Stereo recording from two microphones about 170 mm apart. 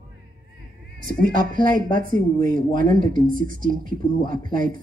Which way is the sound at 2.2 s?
25° left (ahead or behind).